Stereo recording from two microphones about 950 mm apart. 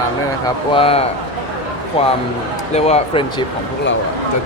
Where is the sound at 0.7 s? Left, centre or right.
Centre.